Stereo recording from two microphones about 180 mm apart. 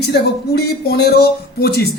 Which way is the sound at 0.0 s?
65° left (ahead or behind).